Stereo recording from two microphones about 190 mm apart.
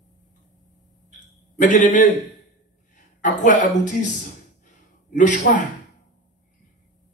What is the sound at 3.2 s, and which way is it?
Speech, 40° left (ahead or behind).